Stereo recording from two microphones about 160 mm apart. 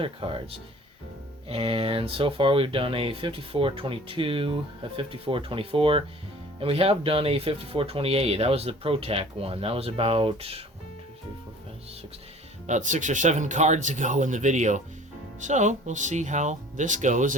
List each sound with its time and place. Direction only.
0.0 s speech: 35° right (ahead or behind)
1.5 s speech: 35° right (ahead or behind)
12.6 s speech: 50° right (ahead or behind)